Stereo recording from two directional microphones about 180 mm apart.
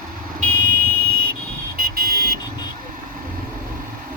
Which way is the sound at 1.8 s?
55° right (ahead or behind).